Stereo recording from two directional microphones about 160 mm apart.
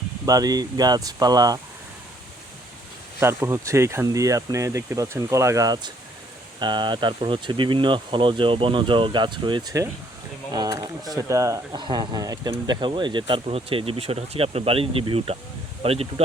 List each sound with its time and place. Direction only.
0.3 s speech: 25° right (ahead or behind)
3.2 s speech: 15° right (ahead or behind); by 16.2 s 40° right (ahead or behind)